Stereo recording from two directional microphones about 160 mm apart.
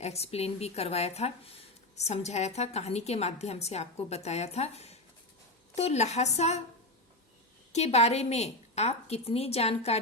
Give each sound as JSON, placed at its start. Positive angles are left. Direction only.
{"t": 0.0, "sound": "a woman's voice", "side_deg": 40}
{"t": 7.7, "sound": "a woman's voice", "side_deg": 40}